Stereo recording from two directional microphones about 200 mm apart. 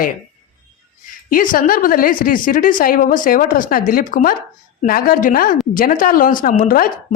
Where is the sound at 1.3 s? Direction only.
45° left (ahead or behind).